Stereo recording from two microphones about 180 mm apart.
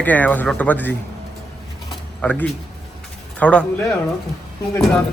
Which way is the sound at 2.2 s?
10° left (ahead or behind).